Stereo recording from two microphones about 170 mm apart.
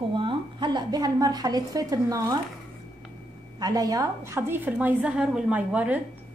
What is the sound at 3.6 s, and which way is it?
A woman's voice, 20° right (ahead or behind).